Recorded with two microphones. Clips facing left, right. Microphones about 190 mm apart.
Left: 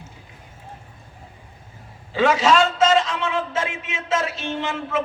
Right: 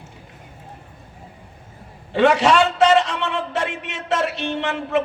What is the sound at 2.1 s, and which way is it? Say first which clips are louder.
A man's voice: right 2 dB; 70° right (ahead or behind).